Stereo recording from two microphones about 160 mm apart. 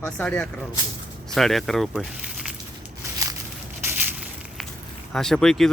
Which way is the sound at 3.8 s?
10° right (ahead or behind).